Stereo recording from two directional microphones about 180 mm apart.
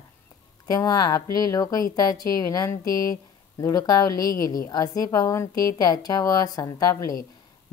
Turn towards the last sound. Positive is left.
turn(degrees=20)  # may be behind; listen again after turning